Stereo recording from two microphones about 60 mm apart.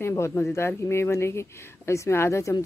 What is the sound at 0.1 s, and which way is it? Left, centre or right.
Speech, left.